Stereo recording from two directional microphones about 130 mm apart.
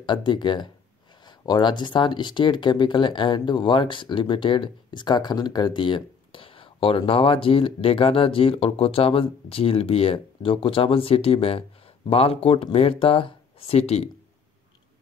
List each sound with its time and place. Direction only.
0.0 s speech: 35° left (ahead or behind); by 14.0 s 50° left (ahead or behind)